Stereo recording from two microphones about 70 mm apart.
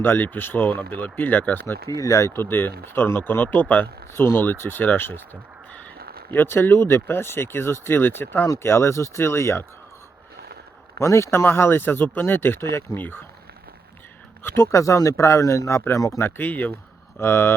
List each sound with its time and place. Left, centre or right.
0.0 s speech: left
1.9 s speech: left
2.3 s speech: left
4.1 s speech: left
11.0 s speech: left
14.4 s speech: left
14.7 s speech: left
16.4 s speech: left
17.2 s speech: left